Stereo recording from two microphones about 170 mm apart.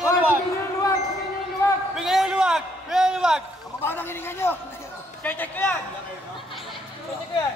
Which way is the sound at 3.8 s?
10° left (ahead or behind).